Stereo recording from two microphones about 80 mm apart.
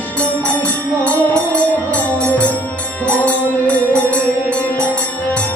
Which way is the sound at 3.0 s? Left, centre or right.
Centre.